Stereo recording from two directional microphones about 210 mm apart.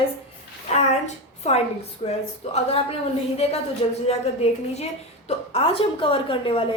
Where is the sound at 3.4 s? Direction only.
30° left (ahead or behind).